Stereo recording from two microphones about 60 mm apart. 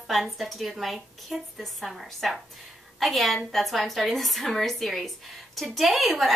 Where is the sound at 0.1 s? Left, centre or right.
Centre.